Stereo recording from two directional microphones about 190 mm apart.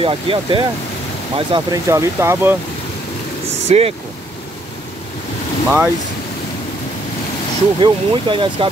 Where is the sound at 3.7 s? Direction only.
35° right (ahead or behind).